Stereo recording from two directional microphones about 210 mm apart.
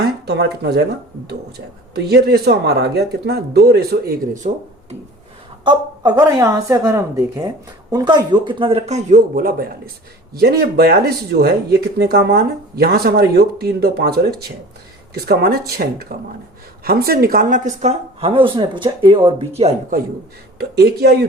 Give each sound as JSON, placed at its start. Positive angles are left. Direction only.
{"t": 0.0, "sound": "speech", "side_deg": -50}
{"t": 2.0, "sound": "speech", "side_deg": -50}
{"t": 5.6, "sound": "a woman's voice", "side_deg": -20}
{"t": 20.6, "sound": "speech", "side_deg": -50}